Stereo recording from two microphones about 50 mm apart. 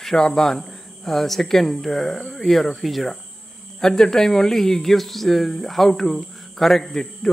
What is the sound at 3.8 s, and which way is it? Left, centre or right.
Speech, centre.